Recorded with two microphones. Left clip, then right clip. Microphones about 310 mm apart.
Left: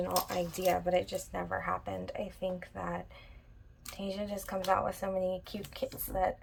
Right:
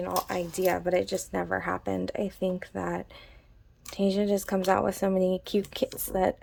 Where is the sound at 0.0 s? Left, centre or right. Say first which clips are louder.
Right 3 dB; centre.